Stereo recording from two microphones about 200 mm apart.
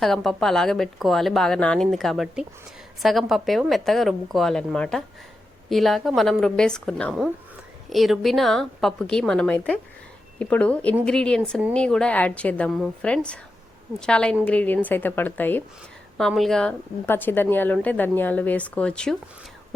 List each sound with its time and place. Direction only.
0.0 s a woman's voice: centre (ahead or behind)